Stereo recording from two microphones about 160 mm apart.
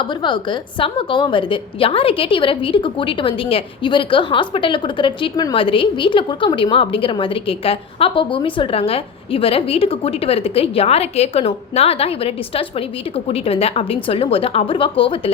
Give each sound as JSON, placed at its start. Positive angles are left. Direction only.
{"t": 0.0, "sound": "a woman's voice", "side_deg": 30}